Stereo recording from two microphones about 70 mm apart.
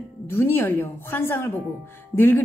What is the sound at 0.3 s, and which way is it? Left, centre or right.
A woman's voice, left.